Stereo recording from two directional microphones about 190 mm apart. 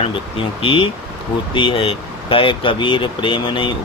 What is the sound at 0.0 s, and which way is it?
Speech, 30° left (ahead or behind).